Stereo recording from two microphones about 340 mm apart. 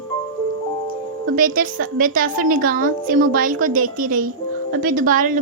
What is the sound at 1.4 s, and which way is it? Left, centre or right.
A woman's voice, right.